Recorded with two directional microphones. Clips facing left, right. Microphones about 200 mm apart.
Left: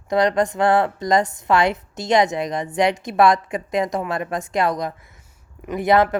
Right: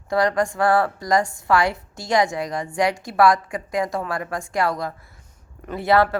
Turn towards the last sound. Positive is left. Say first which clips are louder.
# left 2 dB
turn(degrees=20)  # may be behind; listen again after turning